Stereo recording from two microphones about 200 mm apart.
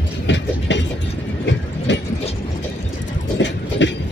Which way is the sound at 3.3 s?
65° left (ahead or behind).